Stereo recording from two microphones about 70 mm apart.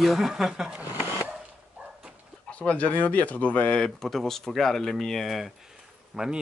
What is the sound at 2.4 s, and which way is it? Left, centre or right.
Speech, centre.